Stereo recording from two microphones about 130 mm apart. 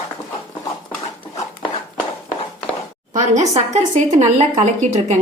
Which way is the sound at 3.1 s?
65° right (ahead or behind).